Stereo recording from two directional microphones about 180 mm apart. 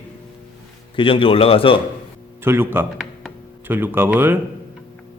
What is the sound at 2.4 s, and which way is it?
Speech, 10° right (ahead or behind).